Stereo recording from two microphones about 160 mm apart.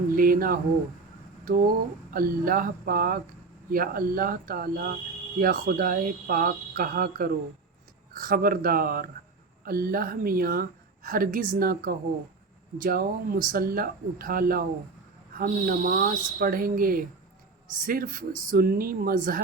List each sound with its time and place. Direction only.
0.2 s speech: 65° right (ahead or behind)